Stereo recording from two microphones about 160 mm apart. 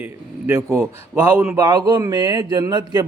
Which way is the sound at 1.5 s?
25° right (ahead or behind).